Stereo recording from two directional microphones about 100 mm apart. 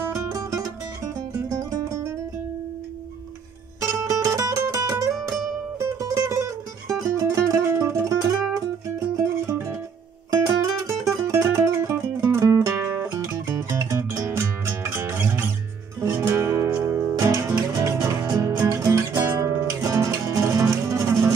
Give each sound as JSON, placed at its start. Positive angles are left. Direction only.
{"t": 0.0, "sound": "music", "side_deg": -30}
{"t": 4.1, "sound": "music", "side_deg": -30}
{"t": 17.7, "sound": "music", "side_deg": -35}